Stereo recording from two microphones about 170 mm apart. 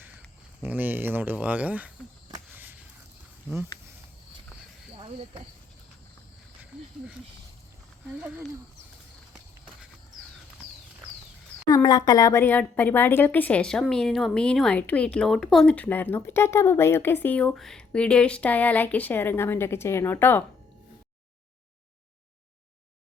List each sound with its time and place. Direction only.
0.6 s speech: 10° right (ahead or behind)
2.6 s a sound: 10° right (ahead or behind)
4.9 s speech: 30° right (ahead or behind)
11.7 s speech: 25° left (ahead or behind)